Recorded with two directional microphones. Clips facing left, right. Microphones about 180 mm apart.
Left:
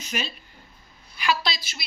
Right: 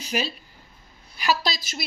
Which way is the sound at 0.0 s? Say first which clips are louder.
Right 4 dB; 35° right (ahead or behind).